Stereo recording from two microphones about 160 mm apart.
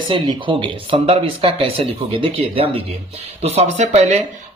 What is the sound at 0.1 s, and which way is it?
A man's voice, 35° right (ahead or behind).